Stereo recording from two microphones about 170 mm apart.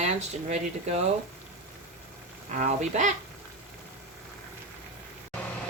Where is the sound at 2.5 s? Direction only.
45° right (ahead or behind).